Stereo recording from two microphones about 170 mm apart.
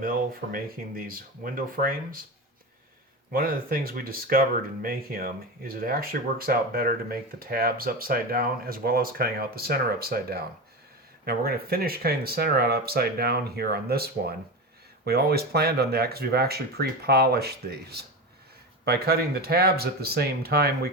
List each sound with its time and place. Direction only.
0.0 s speech: 60° right (ahead or behind)
3.3 s speech: 60° right (ahead or behind)